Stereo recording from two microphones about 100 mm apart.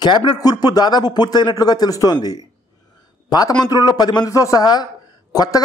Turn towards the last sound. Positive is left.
turn(degrees=40)  # may be behind; listen again after turning